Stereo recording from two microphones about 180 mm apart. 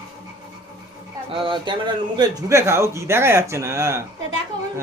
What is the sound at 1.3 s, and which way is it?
A man's voice, 30° right (ahead or behind).